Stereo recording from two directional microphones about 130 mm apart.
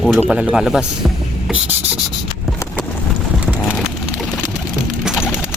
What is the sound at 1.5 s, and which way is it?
Rub, 10° right (ahead or behind).